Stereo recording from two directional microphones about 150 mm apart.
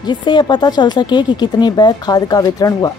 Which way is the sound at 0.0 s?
30° left (ahead or behind).